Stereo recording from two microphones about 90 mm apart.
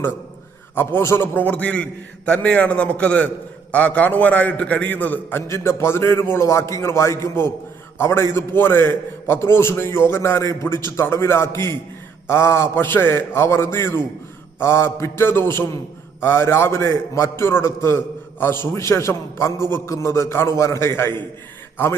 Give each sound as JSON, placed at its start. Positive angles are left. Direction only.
{"t": 0.8, "sound": "a man's voice", "side_deg": 25}
{"t": 5.5, "sound": "a man's voice", "side_deg": 30}